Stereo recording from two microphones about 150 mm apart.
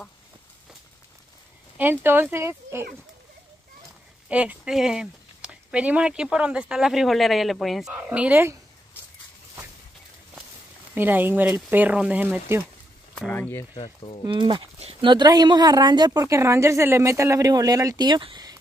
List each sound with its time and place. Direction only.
1.8 s speech: 15° right (ahead or behind)
4.3 s speech: 10° right (ahead or behind)
11.0 s speech: 15° right (ahead or behind)
13.3 s speech: 15° left (ahead or behind)
14.2 s speech: 35° right (ahead or behind)